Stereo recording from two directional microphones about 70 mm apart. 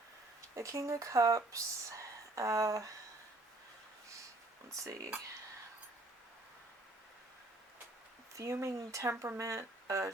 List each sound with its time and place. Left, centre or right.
0.5 s speech: right
4.7 s speech: right
8.4 s speech: right